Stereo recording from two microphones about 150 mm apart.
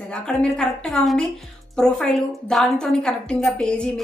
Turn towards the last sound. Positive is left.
turn(degrees=5)  # may be behind; listen again after turning